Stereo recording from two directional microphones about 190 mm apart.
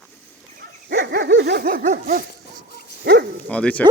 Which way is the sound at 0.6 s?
60° right (ahead or behind).